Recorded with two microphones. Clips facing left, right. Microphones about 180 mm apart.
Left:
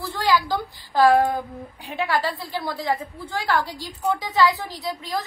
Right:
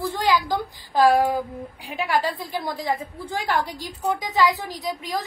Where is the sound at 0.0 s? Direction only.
20° right (ahead or behind).